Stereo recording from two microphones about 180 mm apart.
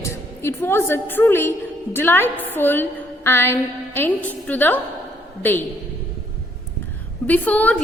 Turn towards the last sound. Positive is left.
turn(degrees=10)  # may be behind; listen again after turning